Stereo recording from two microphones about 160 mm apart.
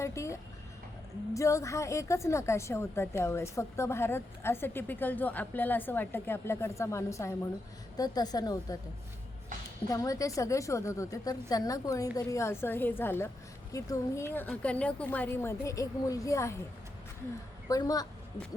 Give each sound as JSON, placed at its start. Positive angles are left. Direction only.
{"t": 0.0, "sound": "music", "side_deg": 20}
{"t": 1.3, "sound": "a woman's voice", "side_deg": 20}
{"t": 9.9, "sound": "a woman's voice", "side_deg": 20}
{"t": 17.7, "sound": "a woman's voice", "side_deg": 25}